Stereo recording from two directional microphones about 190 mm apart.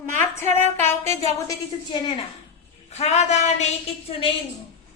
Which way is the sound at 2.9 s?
35° left (ahead or behind).